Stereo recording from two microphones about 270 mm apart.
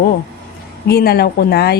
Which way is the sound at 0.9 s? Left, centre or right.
Left.